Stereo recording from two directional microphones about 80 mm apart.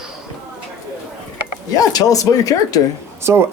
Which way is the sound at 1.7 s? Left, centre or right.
Left.